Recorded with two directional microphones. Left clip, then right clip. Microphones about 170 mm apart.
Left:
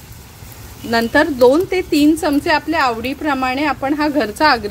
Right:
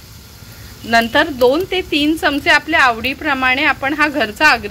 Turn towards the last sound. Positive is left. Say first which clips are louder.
# right 1 dB
turn(degrees=40)  # may be behind; listen again after turning